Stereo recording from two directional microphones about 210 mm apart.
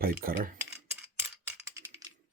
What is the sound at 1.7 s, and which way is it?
Coin, 15° right (ahead or behind).